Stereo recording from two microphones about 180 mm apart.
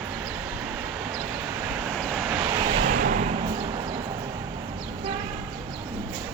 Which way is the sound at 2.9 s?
50° right (ahead or behind).